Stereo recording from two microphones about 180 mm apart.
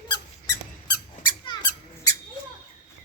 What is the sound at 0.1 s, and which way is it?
Squeak, 20° left (ahead or behind).